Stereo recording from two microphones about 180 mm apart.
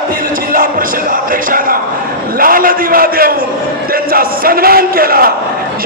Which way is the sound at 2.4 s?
50° right (ahead or behind).